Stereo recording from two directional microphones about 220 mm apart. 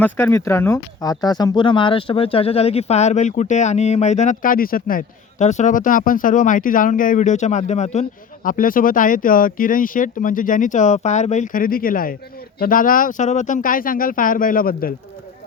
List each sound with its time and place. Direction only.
0.0 s speech: 10° left (ahead or behind); by 14.9 s 40° left (ahead or behind)